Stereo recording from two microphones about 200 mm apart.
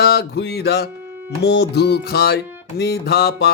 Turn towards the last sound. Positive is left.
turn(degrees=55)  # may be behind; listen again after turning